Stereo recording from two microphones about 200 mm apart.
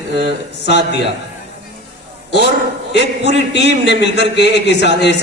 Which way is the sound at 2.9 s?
60° left (ahead or behind).